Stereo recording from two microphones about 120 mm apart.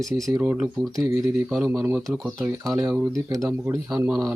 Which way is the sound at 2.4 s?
25° right (ahead or behind).